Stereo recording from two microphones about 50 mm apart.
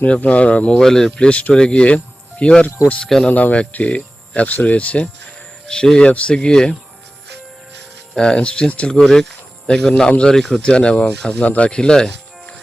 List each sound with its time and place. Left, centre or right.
0.0 s speech: left
0.8 s speech: centre
1.3 s speech: left
3.0 s speech: centre
3.2 s speech: left
5.6 s speech: centre
8.1 s speech: centre
9.0 s speech: centre
10.3 s speech: centre
10.6 s speech: centre
11.4 s speech: left
11.7 s music: centre